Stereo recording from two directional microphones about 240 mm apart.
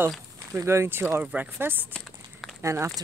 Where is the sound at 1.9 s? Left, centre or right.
Centre.